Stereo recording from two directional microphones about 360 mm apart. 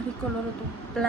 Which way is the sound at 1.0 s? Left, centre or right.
Centre.